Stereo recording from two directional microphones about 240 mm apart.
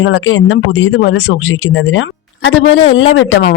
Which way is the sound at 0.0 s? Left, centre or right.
Left.